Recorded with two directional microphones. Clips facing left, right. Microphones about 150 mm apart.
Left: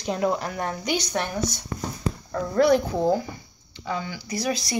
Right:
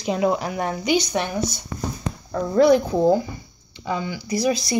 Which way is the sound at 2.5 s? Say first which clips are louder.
Right 4 dB; 15° right (ahead or behind).